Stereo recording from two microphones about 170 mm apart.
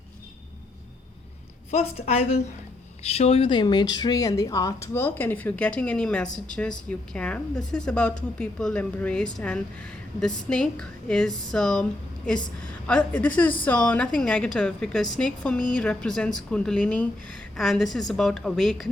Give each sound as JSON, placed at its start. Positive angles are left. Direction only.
{"t": 1.7, "sound": "a woman's voice", "side_deg": 40}